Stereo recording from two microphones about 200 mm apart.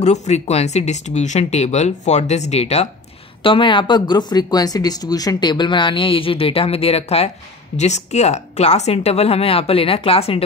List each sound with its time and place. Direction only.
0.0 s speech: 35° left (ahead or behind)